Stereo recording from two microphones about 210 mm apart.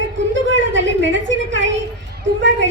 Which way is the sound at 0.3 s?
60° right (ahead or behind).